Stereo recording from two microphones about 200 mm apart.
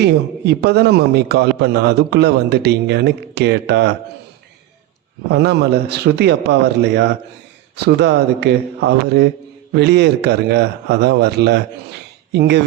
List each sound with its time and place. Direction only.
0.0 s a man's voice: 55° right (ahead or behind)
5.3 s a man's voice: 55° right (ahead or behind)